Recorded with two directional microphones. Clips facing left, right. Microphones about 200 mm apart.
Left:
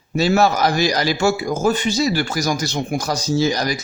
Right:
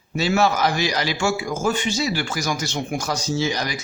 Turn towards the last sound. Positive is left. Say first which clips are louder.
# left 5 dB
turn(degrees=40)  # may be behind; listen again after turning